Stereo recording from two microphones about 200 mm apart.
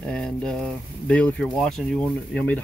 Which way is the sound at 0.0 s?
5° left (ahead or behind).